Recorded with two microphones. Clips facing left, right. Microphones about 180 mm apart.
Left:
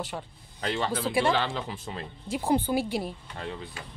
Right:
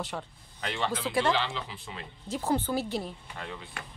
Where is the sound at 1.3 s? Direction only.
50° left (ahead or behind).